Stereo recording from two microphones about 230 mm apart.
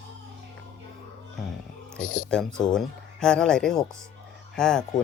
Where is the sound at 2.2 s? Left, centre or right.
Centre.